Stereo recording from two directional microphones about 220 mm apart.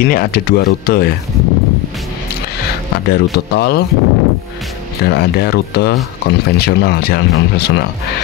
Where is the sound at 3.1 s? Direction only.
45° left (ahead or behind).